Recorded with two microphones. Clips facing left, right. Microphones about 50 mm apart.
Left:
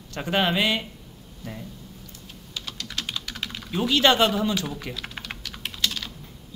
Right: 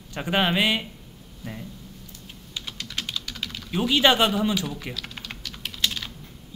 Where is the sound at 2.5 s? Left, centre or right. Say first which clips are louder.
Even; right.